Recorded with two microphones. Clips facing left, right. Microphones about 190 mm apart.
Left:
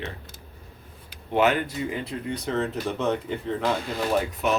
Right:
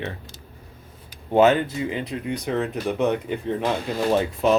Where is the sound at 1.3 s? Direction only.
25° right (ahead or behind).